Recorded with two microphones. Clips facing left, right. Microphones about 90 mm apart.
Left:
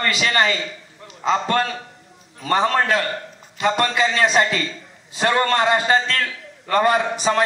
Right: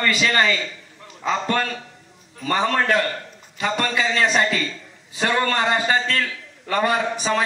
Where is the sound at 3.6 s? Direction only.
20° left (ahead or behind).